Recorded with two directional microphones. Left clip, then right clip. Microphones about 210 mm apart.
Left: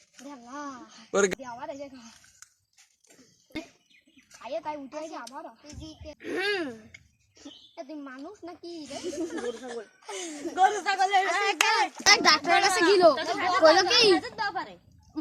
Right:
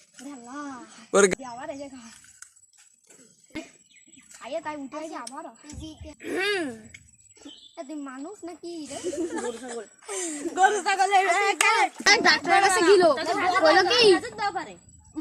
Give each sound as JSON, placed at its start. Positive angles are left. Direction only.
{"t": 0.4, "sound": "a sound", "side_deg": 25}
{"t": 1.1, "sound": "a woman's voice", "side_deg": -10}
{"t": 1.4, "sound": "speech", "side_deg": 25}
{"t": 4.4, "sound": "speech", "side_deg": 25}
{"t": 6.1, "sound": "a sound", "side_deg": 0}
{"t": 7.8, "sound": "speech", "side_deg": 25}
{"t": 9.0, "sound": "speech", "side_deg": 40}
{"t": 9.2, "sound": "speech", "side_deg": 25}
{"t": 12.0, "sound": "speech", "side_deg": 40}